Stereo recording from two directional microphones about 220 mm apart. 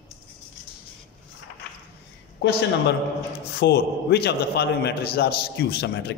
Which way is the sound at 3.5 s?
50° left (ahead or behind).